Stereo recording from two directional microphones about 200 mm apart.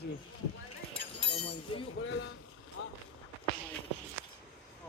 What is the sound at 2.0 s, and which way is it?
Speech, 65° left (ahead or behind).